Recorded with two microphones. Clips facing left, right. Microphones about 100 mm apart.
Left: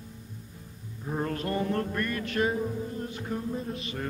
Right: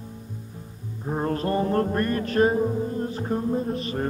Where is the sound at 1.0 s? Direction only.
35° right (ahead or behind).